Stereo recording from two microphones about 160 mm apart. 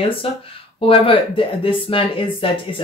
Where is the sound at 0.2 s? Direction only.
35° left (ahead or behind).